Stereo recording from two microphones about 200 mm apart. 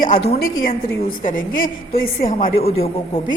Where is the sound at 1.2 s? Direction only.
45° left (ahead or behind).